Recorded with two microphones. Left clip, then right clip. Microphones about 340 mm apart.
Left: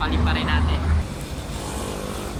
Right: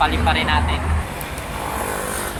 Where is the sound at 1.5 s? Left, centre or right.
Right.